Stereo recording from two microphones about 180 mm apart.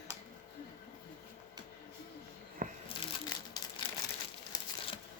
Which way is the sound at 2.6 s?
50° right (ahead or behind).